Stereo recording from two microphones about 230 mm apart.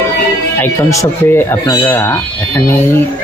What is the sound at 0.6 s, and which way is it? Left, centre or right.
Speech, centre.